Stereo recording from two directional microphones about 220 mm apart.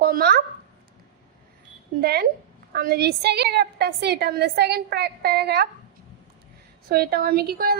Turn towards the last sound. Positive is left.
turn(degrees=-45)  # may be behind; listen again after turning